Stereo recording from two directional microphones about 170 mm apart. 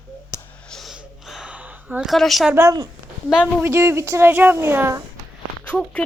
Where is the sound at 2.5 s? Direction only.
20° right (ahead or behind).